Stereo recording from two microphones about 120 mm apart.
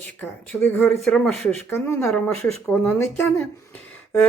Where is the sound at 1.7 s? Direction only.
20° left (ahead or behind).